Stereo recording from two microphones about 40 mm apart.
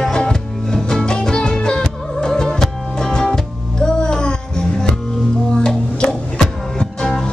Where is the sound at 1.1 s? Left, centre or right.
Left.